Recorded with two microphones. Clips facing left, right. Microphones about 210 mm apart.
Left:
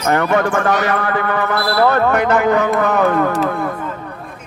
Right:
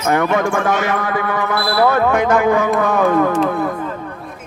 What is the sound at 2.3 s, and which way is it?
Speech, centre (ahead or behind).